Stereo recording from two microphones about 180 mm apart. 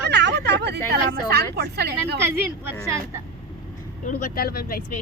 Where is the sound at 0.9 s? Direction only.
65° right (ahead or behind).